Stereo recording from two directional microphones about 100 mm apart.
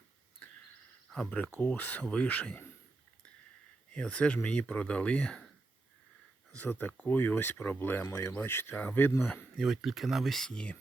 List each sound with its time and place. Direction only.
1.1 s speech: 10° left (ahead or behind)
3.9 s speech: 10° left (ahead or behind)
6.6 s speech: 20° left (ahead or behind)
8.0 s speech: 30° left (ahead or behind)
9.6 s speech: centre (ahead or behind)